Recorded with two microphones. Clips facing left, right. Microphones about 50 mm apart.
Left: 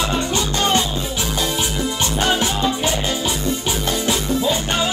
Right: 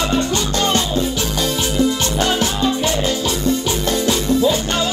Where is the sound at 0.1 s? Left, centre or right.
Centre.